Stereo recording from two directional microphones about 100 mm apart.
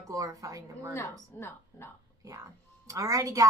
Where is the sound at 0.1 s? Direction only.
35° right (ahead or behind).